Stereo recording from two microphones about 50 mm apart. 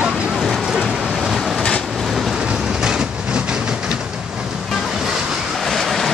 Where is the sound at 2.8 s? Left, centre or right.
Centre.